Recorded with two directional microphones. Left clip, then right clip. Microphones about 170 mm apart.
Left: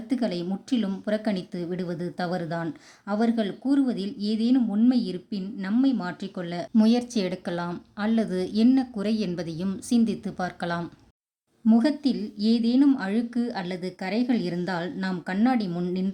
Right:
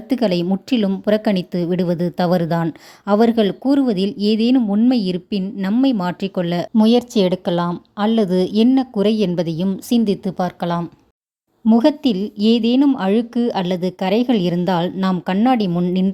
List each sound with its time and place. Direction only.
0.1 s a woman's voice: 45° right (ahead or behind)
6.7 s a woman's voice: 30° right (ahead or behind)